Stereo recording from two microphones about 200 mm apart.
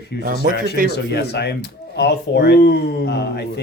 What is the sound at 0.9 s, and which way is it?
Speech, 55° left (ahead or behind).